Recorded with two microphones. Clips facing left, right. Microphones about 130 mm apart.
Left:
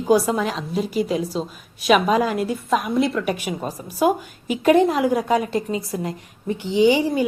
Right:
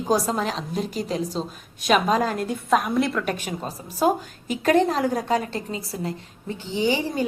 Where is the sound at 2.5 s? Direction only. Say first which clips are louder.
Even; 45° right (ahead or behind).